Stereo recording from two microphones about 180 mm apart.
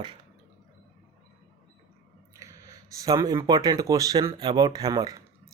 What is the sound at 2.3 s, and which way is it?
Speech, 15° right (ahead or behind).